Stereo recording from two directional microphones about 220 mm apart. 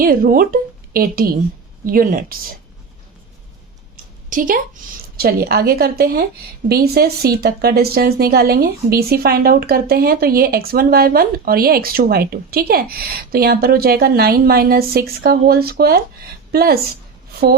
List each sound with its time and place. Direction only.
0.0 s a woman's voice: 40° right (ahead or behind)
4.3 s a woman's voice: 35° right (ahead or behind)